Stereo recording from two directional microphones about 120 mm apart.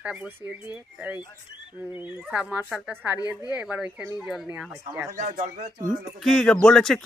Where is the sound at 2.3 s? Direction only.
10° right (ahead or behind).